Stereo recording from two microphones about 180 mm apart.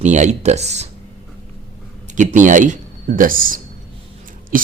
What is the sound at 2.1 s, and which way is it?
Speech, 40° right (ahead or behind).